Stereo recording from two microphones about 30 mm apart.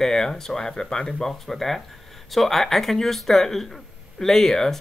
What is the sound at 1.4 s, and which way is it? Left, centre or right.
Speech, centre.